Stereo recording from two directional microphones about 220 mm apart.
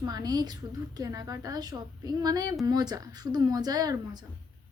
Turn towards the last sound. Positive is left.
turn(degrees=-15)  # may be behind; listen again after turning